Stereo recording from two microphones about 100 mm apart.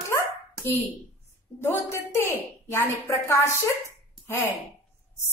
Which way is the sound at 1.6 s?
25° left (ahead or behind).